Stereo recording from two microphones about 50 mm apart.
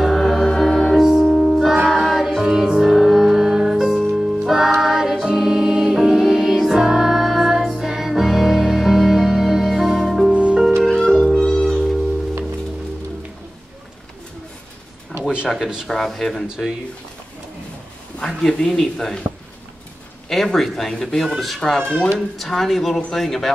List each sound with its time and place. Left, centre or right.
0.0 s music: centre
10.3 s music: right
10.9 s music: centre
15.4 s a sound: centre
15.9 s speech: centre
16.4 s speech: centre
18.2 s speech: centre
20.2 s speech: centre